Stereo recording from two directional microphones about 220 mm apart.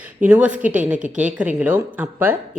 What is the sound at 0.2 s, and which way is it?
Speech, 5° right (ahead or behind).